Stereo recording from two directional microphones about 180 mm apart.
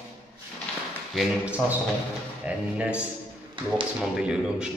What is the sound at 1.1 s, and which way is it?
Speech, 5° right (ahead or behind).